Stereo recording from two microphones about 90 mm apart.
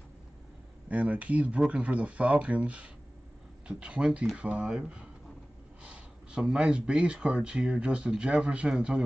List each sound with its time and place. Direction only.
0.8 s speech: 15° right (ahead or behind)